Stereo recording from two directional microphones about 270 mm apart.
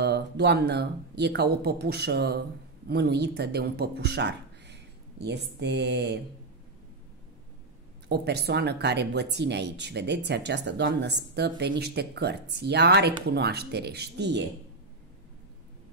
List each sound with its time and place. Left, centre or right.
0.0 s speech: right
8.1 s speech: right